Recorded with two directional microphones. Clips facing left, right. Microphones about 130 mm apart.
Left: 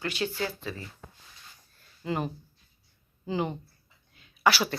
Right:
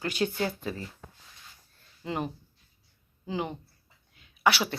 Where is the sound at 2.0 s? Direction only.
15° right (ahead or behind).